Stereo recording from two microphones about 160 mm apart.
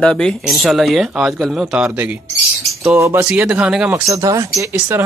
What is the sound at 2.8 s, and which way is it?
Speech, 15° right (ahead or behind).